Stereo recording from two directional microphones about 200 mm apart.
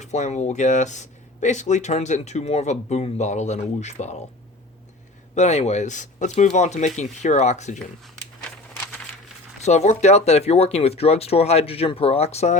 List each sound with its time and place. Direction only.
0.0 s speech: 35° left (ahead or behind)
5.3 s speech: 35° left (ahead or behind)
9.6 s speech: 35° left (ahead or behind)